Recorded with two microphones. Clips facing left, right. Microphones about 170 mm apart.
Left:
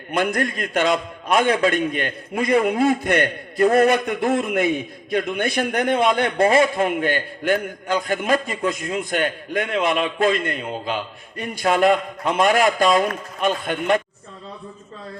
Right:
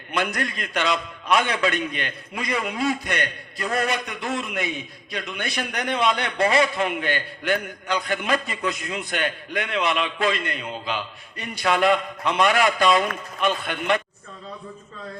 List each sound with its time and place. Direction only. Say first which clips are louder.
0.1 s a man's voice: left 5 dB; 50° left (ahead or behind)